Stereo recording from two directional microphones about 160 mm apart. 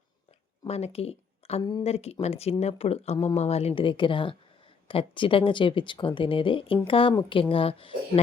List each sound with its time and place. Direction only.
0.7 s speech: 40° left (ahead or behind)